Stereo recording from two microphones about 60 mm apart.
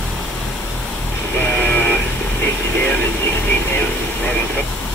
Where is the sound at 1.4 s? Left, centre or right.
Left.